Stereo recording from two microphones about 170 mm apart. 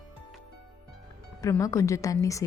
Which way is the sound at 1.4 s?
20° left (ahead or behind).